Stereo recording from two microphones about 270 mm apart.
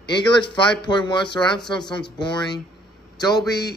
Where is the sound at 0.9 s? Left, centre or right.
Centre.